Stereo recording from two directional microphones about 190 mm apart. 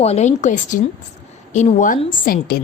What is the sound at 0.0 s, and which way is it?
A woman's voice, 35° left (ahead or behind).